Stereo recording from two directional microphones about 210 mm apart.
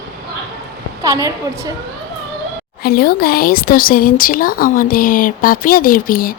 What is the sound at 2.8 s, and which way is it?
Speech, 45° left (ahead or behind).